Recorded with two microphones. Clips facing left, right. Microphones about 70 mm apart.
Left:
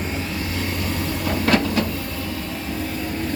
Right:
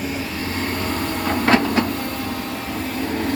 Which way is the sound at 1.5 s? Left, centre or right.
Right.